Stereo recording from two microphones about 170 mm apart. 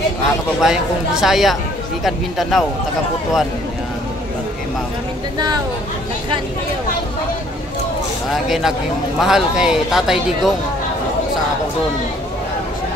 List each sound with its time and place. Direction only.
0.6 s speech: 5° right (ahead or behind)
8.3 s speech: centre (ahead or behind)